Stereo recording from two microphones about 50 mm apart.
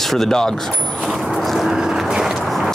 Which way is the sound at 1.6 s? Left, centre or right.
Centre.